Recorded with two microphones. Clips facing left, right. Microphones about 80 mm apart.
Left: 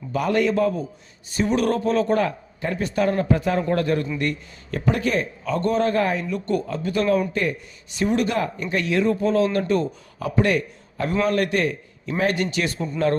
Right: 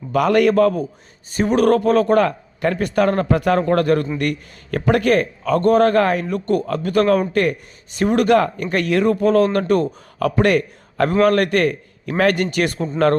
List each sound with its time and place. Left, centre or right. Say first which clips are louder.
0.1 s a man's voice: right 6 dB; right
1.3 s speech: right 6 dB; right
3.7 s speech: right 5 dB; right
6.7 s speech: right 6 dB; right
7.9 s speech: right 7 dB; right